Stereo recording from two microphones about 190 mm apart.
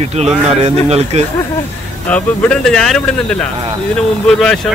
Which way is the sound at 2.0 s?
5° left (ahead or behind).